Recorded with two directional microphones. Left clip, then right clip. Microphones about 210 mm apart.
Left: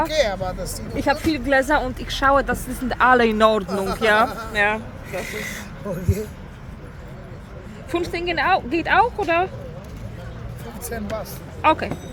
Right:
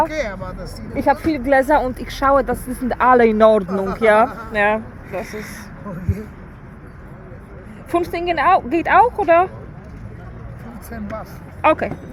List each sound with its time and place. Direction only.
0.1 s speech: 40° left (ahead or behind)
0.9 s speech: 30° right (ahead or behind)
7.9 s speech: 40° right (ahead or behind)
10.9 s speech: 45° left (ahead or behind)
11.6 s speech: 40° right (ahead or behind)